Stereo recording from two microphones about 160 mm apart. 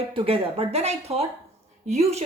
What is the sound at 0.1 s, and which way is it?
Speech, 35° right (ahead or behind).